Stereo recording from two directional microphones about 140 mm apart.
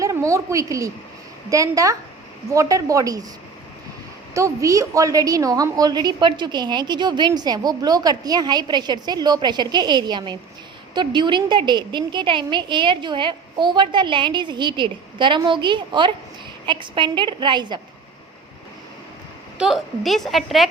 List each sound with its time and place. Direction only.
0.0 s a woman's voice: 20° right (ahead or behind)
4.4 s a woman's voice: 20° right (ahead or behind)
19.5 s a woman's voice: 5° right (ahead or behind)